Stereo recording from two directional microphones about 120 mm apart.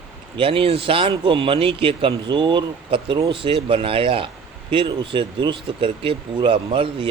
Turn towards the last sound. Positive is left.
turn(degrees=-50)  # may be behind; listen again after turning